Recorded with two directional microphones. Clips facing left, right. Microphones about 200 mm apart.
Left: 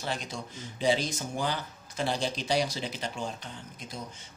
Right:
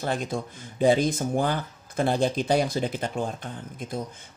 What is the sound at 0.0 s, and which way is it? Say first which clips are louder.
Speech: right 7 dB; 50° right (ahead or behind).